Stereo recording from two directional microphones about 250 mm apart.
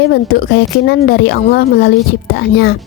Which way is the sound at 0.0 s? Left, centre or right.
Left.